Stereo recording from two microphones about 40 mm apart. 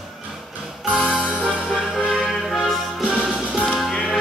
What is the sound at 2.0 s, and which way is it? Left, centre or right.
Music, centre.